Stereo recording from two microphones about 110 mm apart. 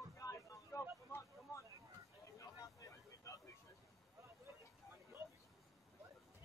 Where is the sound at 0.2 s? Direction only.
30° left (ahead or behind).